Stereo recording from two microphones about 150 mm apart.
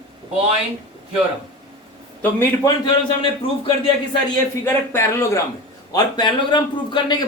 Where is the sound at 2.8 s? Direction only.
35° left (ahead or behind).